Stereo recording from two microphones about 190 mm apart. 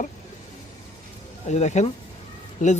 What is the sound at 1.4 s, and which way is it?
Speech, 35° left (ahead or behind).